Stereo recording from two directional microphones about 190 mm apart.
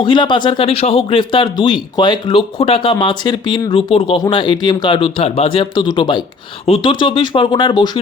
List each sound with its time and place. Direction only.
0.0 s speech: 25° left (ahead or behind)